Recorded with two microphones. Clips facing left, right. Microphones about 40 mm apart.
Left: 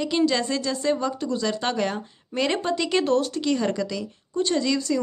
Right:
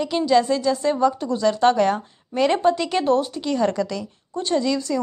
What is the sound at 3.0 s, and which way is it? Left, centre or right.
A woman's voice, right.